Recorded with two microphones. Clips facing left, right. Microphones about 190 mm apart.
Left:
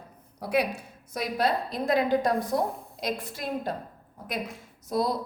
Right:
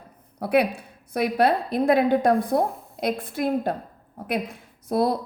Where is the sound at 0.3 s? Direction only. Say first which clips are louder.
Right 5 dB; 60° right (ahead or behind).